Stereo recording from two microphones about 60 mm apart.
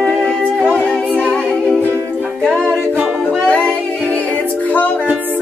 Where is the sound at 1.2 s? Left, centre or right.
Centre.